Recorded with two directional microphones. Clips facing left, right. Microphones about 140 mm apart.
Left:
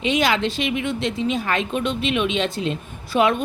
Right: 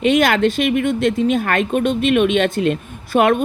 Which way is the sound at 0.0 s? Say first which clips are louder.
Right 6 dB; 55° right (ahead or behind).